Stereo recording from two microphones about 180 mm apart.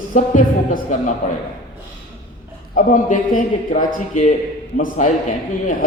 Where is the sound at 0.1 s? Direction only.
45° left (ahead or behind).